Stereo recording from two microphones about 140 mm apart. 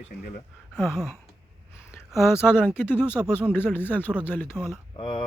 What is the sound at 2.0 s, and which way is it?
Speech, centre (ahead or behind).